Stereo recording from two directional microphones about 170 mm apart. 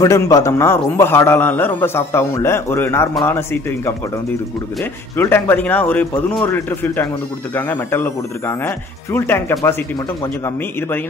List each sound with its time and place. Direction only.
0.0 s a man's voice: 20° left (ahead or behind)
5.1 s a man's voice: 15° left (ahead or behind)